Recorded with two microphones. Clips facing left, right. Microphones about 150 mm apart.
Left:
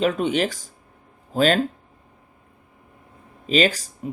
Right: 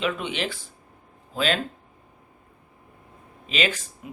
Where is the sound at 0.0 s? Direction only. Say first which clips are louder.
Left 7 dB; 40° left (ahead or behind).